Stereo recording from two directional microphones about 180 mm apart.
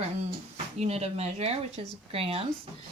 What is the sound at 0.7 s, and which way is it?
Speech, 35° right (ahead or behind).